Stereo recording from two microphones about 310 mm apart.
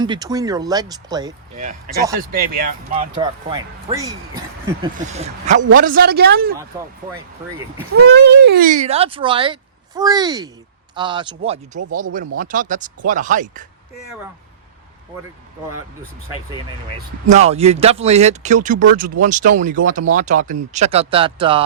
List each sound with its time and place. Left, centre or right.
0.0 s speech: centre
2.1 s speech: right; by 4.9 s centre
5.0 s speech: right
8.1 s speech: right
17.2 s speech: right